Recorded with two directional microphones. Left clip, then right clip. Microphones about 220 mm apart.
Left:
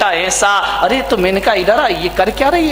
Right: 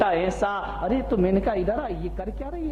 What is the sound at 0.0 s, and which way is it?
A man's voice, 5° left (ahead or behind).